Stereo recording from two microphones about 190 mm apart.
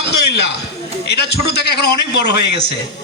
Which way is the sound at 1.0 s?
60° left (ahead or behind).